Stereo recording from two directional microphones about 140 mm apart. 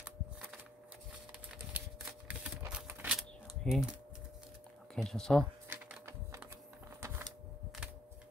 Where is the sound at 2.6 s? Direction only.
5° right (ahead or behind).